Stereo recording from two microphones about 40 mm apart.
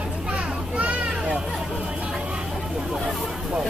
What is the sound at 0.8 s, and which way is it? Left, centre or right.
Children playing, right.